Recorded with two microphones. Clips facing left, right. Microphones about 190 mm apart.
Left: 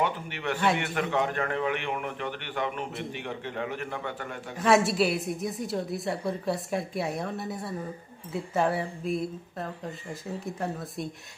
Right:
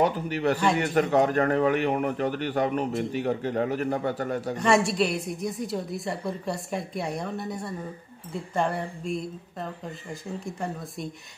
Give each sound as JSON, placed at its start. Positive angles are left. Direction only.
{"t": 0.0, "sound": "a man's voice", "side_deg": -40}
{"t": 4.6, "sound": "a woman's voice", "side_deg": 0}